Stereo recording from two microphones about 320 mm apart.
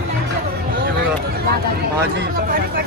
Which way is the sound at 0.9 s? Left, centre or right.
Right.